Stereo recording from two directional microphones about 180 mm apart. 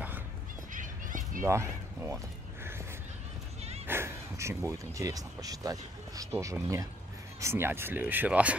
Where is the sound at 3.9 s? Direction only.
15° right (ahead or behind).